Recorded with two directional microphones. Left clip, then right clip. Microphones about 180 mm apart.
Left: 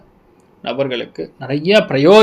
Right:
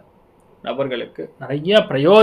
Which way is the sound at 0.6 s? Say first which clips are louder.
Left 3 dB; 45° left (ahead or behind).